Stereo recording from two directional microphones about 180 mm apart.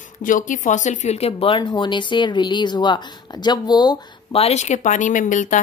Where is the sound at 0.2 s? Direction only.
45° left (ahead or behind).